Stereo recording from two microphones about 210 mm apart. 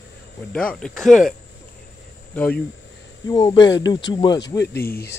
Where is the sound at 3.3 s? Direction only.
20° left (ahead or behind).